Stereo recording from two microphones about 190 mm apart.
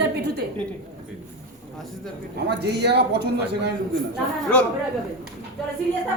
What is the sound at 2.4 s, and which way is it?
A man's voice, 60° right (ahead or behind).